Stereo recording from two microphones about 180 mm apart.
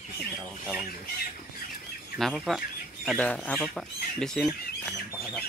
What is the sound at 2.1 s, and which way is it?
Speech, centre (ahead or behind).